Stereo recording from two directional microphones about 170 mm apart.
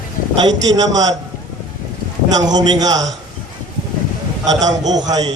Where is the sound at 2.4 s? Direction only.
25° right (ahead or behind).